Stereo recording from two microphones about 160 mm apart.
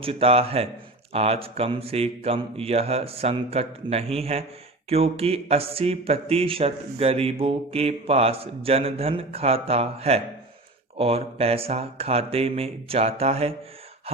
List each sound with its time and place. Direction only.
0.0 s speech: 35° right (ahead or behind)